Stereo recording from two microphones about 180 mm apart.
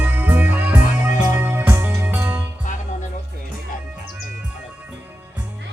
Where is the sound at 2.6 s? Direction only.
45° left (ahead or behind).